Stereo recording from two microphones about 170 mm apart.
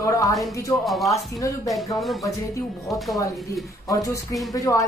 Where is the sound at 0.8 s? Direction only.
Centre (ahead or behind).